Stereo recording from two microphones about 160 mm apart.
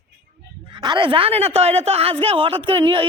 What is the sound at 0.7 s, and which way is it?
Speech, 30° right (ahead or behind).